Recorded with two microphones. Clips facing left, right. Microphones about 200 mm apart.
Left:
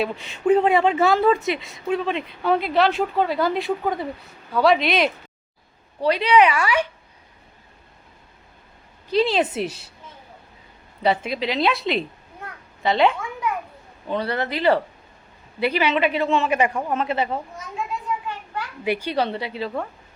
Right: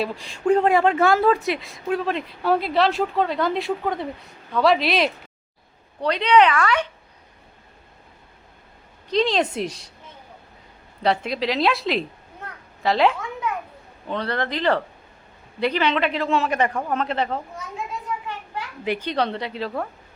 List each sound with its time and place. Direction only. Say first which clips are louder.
0.0 s speech: left 1 dB; centre (ahead or behind)
9.0 s speech: left 1 dB; 5° left (ahead or behind)
11.0 s speech: even; centre (ahead or behind)
18.9 s speech: left 1 dB; 10° left (ahead or behind)